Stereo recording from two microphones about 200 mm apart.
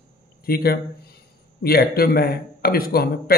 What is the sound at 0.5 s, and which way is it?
A man's voice, 50° left (ahead or behind).